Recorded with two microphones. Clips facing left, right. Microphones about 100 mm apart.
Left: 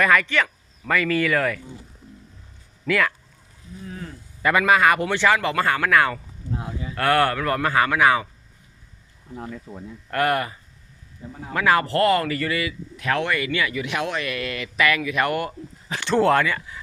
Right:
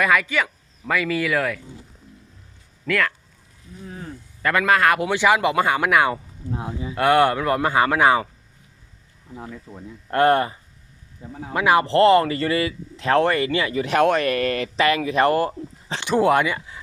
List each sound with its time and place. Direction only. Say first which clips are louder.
0.0 s speech: left 1 dB; 5° right (ahead or behind)
2.8 s speech: left 1 dB; 5° left (ahead or behind)
4.4 s speech: left 1 dB; 5° left (ahead or behind)
5.0 s speech: right 2 dB; 10° right (ahead or behind); by 8.3 s 30° right (ahead or behind)
9.3 s speech: left 2 dB; 5° right (ahead or behind)
10.1 s speech: right 5 dB; 30° right (ahead or behind)
11.5 s speech: right 3 dB; 20° right (ahead or behind)
16.0 s speech: right 1 dB; 10° right (ahead or behind)